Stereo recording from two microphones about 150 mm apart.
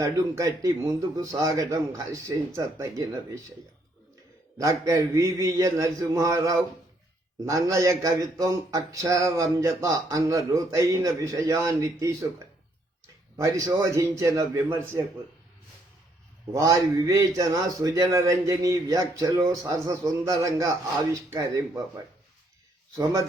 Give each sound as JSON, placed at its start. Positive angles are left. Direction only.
{"t": 0.0, "sound": "a man's voice", "side_deg": -20}
{"t": 4.5, "sound": "a man's voice", "side_deg": -20}
{"t": 13.3, "sound": "a man's voice", "side_deg": -20}
{"t": 16.5, "sound": "a man's voice", "side_deg": -20}